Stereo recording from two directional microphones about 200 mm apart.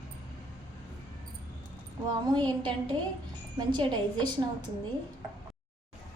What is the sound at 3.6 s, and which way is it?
Speech, 20° right (ahead or behind).